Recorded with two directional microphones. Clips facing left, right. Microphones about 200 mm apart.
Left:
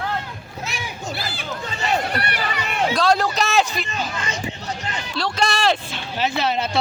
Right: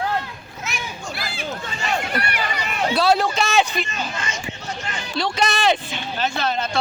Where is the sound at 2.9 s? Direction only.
5° right (ahead or behind).